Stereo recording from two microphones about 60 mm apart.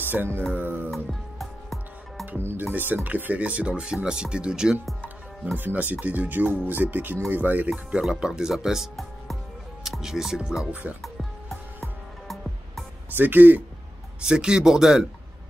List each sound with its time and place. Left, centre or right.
0.0 s speech: right
0.9 s music: centre
2.3 s speech: right; by 4.7 s centre
5.6 s speech: right
7.7 s speech: centre
10.7 s speech: right
11.0 s music: centre
13.1 s speech: right
14.2 s speech: centre